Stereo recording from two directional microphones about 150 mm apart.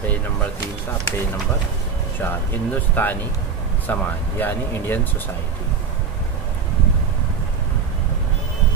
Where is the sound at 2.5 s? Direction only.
10° left (ahead or behind).